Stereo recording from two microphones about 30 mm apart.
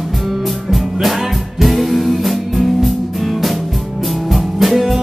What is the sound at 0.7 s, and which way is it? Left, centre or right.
Music, centre.